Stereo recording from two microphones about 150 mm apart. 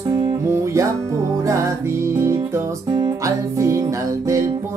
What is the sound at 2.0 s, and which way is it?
Music, 20° right (ahead or behind).